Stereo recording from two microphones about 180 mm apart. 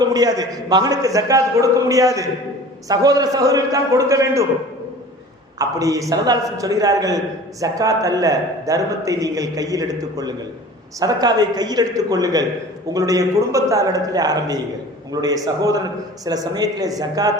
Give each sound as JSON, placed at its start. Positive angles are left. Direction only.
{"t": 0.0, "sound": "a man's voice", "side_deg": -20}
{"t": 5.5, "sound": "a man's voice", "side_deg": -20}